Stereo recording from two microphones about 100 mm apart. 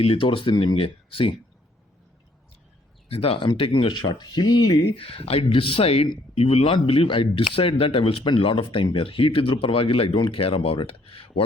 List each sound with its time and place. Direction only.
0.0 s speech: 65° left (ahead or behind)
3.1 s speech: 70° left (ahead or behind); by 5.0 s 50° left (ahead or behind)
5.0 s speech: 75° left (ahead or behind)